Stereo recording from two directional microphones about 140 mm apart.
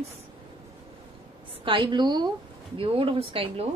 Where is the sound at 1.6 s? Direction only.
35° right (ahead or behind).